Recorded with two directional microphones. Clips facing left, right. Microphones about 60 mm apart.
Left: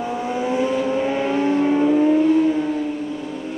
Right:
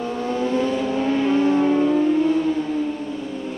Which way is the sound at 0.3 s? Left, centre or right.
Centre.